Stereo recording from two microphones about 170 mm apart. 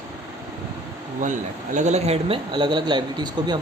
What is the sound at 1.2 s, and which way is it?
Speech, 45° right (ahead or behind).